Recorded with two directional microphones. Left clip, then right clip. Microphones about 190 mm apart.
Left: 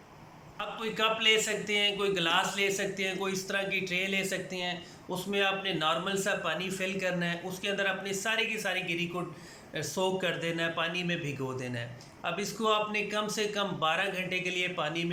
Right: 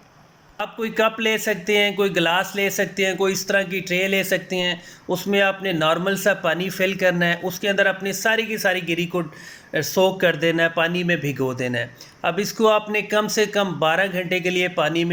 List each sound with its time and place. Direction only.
0.6 s a man's voice: 35° right (ahead or behind)